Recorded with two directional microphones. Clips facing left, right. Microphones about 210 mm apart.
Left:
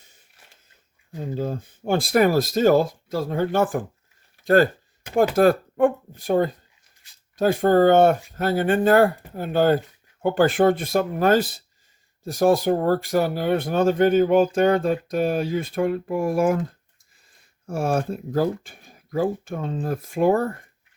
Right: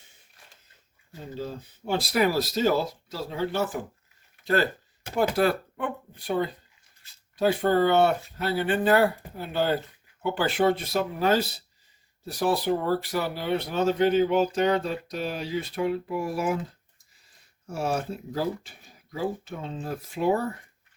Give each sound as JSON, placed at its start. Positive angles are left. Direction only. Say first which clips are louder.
{"t": 1.4, "sound": "speech", "louder": "left 5 dB", "side_deg": 50}
{"t": 17.7, "sound": "speech", "louder": "left 5 dB", "side_deg": 50}